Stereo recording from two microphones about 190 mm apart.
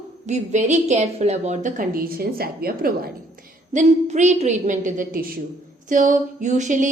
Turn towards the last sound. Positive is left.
turn(degrees=-40)  # may be behind; listen again after turning